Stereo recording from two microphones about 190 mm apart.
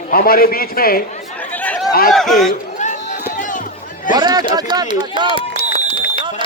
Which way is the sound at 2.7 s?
40° left (ahead or behind).